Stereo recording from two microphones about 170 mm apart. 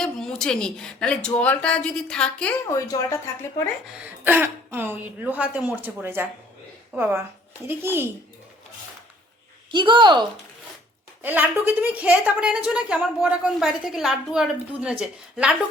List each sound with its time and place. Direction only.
0.0 s a woman's voice: 5° left (ahead or behind); by 3.2 s 20° left (ahead or behind)
4.2 s speech: 10° right (ahead or behind)
9.7 s a woman's voice: 30° right (ahead or behind)
11.2 s a woman's voice: 10° right (ahead or behind)